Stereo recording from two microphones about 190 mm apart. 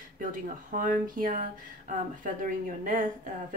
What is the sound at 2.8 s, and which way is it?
Speech, 45° right (ahead or behind).